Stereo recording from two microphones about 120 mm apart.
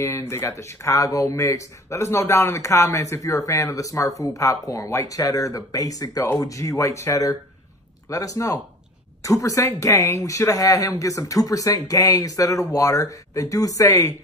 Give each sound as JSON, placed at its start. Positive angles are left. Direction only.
{"t": 0.0, "sound": "speech", "side_deg": 20}